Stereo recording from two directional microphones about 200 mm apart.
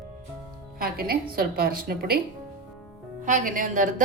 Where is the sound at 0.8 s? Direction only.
50° right (ahead or behind).